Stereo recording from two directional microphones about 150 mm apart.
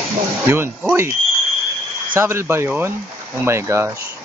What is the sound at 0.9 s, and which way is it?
Speech, 15° right (ahead or behind).